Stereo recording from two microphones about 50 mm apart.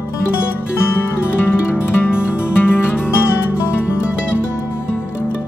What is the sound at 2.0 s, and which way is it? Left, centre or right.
Music, left.